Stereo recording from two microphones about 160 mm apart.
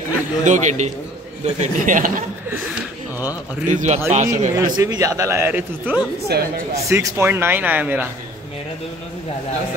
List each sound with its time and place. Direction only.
0.5 s a man's voice: 45° right (ahead or behind)
3.6 s a man's voice: 50° right (ahead or behind)
4.6 s a man's voice: 25° right (ahead or behind)
6.3 s speech: 90° right
6.9 s speech: 20° right (ahead or behind)